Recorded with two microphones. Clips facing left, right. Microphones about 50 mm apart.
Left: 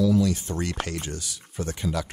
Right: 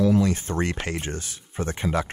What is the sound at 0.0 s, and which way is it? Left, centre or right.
Speech, right.